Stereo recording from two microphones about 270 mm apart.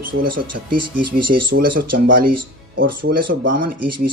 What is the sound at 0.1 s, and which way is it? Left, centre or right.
Speech, right.